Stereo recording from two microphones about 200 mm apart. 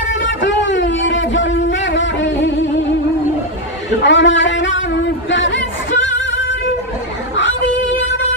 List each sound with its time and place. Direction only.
0.1 s a man's voice: 65° left (ahead or behind)
4.0 s speech: 65° left (ahead or behind)
7.3 s a sound: 65° left (ahead or behind)